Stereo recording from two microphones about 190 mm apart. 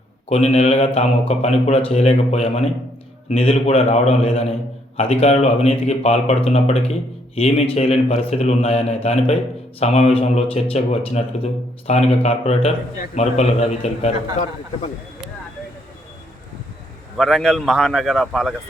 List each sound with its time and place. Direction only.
0.3 s speech: 35° left (ahead or behind)
17.2 s speech: centre (ahead or behind)